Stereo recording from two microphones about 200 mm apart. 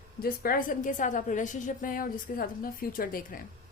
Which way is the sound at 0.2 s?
45° left (ahead or behind).